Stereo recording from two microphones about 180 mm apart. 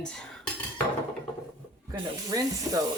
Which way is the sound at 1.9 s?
20° right (ahead or behind).